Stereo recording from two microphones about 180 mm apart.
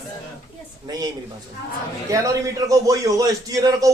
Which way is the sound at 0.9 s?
20° right (ahead or behind).